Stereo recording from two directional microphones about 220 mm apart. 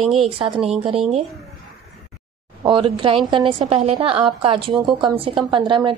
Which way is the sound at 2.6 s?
20° right (ahead or behind).